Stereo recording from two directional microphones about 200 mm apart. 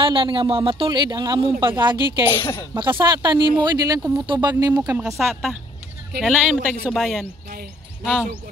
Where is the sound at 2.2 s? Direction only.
10° left (ahead or behind).